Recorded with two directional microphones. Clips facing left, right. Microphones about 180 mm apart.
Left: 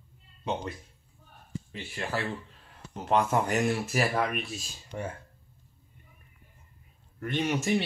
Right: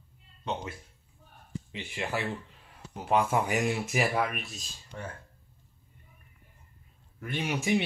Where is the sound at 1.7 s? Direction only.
15° right (ahead or behind).